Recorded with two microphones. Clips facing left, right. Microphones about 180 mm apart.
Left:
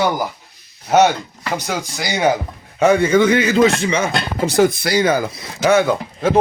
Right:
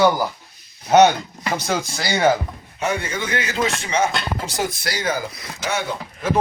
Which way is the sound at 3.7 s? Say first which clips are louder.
Left 4 dB; 50° left (ahead or behind).